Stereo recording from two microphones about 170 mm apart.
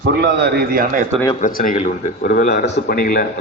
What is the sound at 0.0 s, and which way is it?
A man's voice, 75° right (ahead or behind).